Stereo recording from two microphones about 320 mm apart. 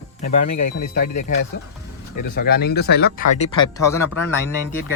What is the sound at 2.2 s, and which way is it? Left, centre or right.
Speech, left.